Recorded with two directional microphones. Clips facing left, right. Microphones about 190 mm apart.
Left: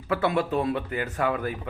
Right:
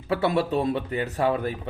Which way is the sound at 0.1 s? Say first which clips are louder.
Right 1 dB; 35° right (ahead or behind).